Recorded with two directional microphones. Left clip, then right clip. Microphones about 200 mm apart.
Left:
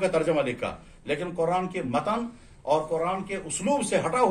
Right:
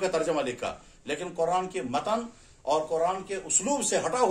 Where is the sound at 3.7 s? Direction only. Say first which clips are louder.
Left 4 dB; 30° right (ahead or behind).